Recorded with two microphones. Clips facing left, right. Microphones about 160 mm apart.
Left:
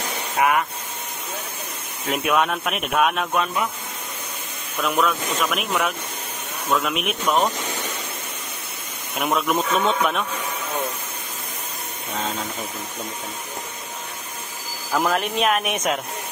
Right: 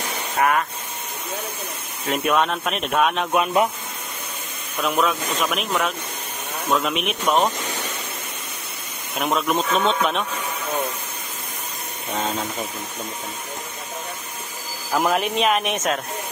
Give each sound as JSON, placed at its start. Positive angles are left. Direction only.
{"t": 0.4, "sound": "speech", "side_deg": 10}
{"t": 2.0, "sound": "speech", "side_deg": 5}
{"t": 4.8, "sound": "speech", "side_deg": 0}
{"t": 9.2, "sound": "speech", "side_deg": 0}
{"t": 14.9, "sound": "speech", "side_deg": -5}